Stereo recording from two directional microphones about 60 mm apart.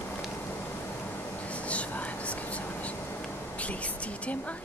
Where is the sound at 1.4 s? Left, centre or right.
Left.